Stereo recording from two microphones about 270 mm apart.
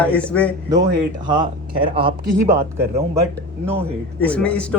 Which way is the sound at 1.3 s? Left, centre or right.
Centre.